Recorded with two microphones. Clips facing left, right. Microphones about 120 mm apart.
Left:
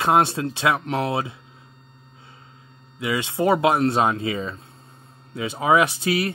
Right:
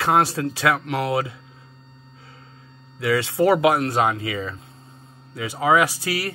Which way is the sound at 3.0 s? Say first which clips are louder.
Right 3 dB; 20° left (ahead or behind).